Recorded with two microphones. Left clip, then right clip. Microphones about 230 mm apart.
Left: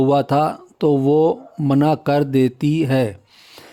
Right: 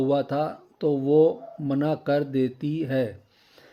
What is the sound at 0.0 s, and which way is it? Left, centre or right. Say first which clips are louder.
Speech: left 8 dB; left.